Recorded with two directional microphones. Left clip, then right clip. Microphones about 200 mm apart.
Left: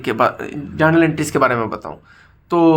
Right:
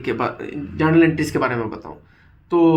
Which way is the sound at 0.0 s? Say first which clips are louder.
Left 6 dB; 45° left (ahead or behind).